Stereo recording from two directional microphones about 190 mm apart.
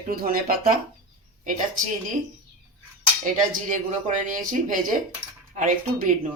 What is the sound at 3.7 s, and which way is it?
Speech, 40° right (ahead or behind).